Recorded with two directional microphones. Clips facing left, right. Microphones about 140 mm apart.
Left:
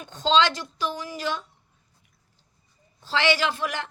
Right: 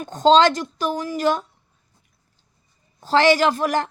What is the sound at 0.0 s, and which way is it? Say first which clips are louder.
A woman's voice: right 7 dB; 45° right (ahead or behind).